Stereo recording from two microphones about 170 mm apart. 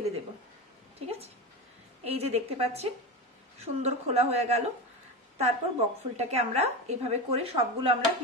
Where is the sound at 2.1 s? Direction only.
35° right (ahead or behind).